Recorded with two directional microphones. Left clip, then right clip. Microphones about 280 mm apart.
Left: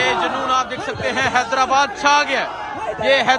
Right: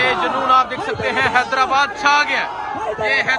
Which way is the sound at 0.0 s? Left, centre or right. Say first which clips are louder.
Right 1 dB; centre.